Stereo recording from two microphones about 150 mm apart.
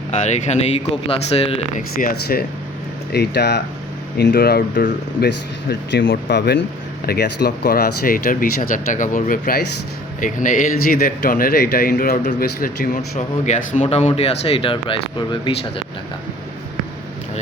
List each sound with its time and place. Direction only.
0.1 s speech: 50° left (ahead or behind)
2.0 s speech: 80° left
10.2 s speech: 60° left (ahead or behind)
13.1 s speech: 50° left (ahead or behind); by 15.5 s 35° left (ahead or behind)